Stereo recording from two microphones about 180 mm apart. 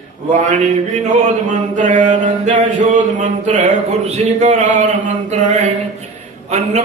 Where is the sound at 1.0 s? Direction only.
40° right (ahead or behind).